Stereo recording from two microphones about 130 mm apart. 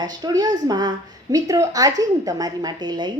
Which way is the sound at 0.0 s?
30° right (ahead or behind).